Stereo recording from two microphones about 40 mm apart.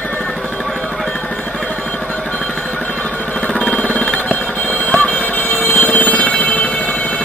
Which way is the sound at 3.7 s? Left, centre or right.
Left.